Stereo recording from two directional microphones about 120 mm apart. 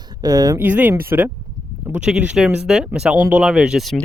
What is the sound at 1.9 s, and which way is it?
Speech, 10° right (ahead or behind).